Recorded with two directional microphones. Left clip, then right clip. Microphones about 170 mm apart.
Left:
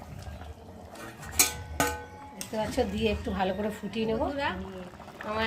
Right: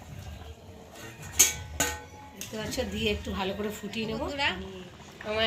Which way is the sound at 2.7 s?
75° left (ahead or behind).